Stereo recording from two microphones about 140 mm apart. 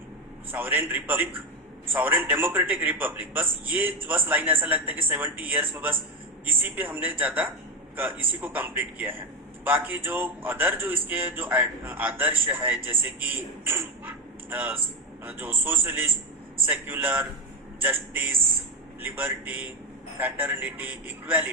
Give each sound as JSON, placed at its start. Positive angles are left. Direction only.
{"t": 0.5, "sound": "a man's voice", "side_deg": -15}